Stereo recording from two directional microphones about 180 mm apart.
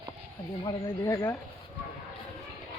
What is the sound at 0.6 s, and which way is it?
Speech, 20° left (ahead or behind).